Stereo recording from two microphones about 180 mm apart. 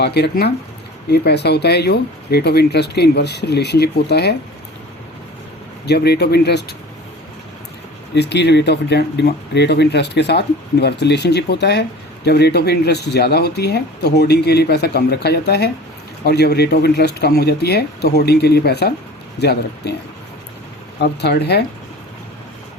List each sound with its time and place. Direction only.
0.0 s speech: 65° left (ahead or behind)
5.8 s speech: 65° left (ahead or behind)
8.1 s speech: 70° left (ahead or behind)
21.0 s speech: 70° left (ahead or behind)